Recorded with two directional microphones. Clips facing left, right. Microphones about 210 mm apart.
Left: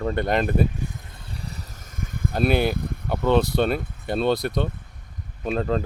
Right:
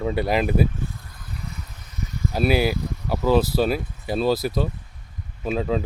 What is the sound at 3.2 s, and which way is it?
Speech, 5° right (ahead or behind).